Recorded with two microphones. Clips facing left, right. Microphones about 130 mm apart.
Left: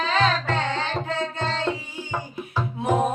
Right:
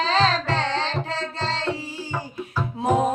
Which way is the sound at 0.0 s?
30° right (ahead or behind).